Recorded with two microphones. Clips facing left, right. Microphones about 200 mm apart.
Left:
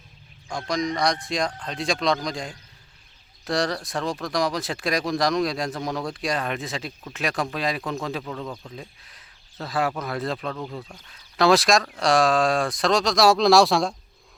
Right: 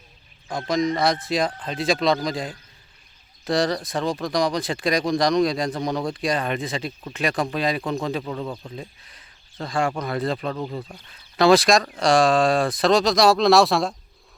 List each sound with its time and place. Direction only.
0.4 s speech: centre (ahead or behind)
8.2 s speech: 10° right (ahead or behind)
8.7 s speech: centre (ahead or behind)